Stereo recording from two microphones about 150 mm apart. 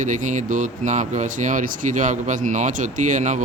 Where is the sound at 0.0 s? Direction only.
55° right (ahead or behind).